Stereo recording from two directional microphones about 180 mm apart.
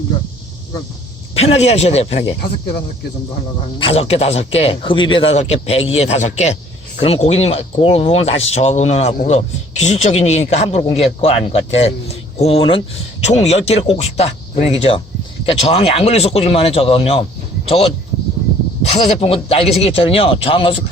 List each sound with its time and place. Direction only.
1.4 s speech: 35° left (ahead or behind)
3.8 s speech: 35° left (ahead or behind)